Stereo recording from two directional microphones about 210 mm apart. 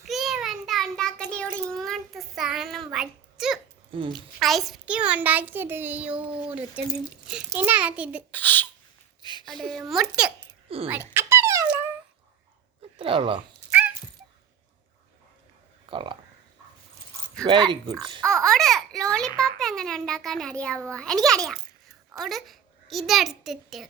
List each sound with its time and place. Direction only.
0.0 s child singing: centre (ahead or behind)
3.9 s speech: 25° right (ahead or behind)
4.4 s a child's voice: centre (ahead or behind)
8.3 s a child's voice: 10° left (ahead or behind)
9.2 s a sound: 20° left (ahead or behind)
9.5 s a child's voice: centre (ahead or behind)
11.1 s dog: 10° right (ahead or behind)
13.0 s speech: 25° right (ahead or behind)
15.9 s speech: 25° right (ahead or behind)
17.4 s speech: 20° right (ahead or behind)
18.2 s a child's voice: 5° left (ahead or behind)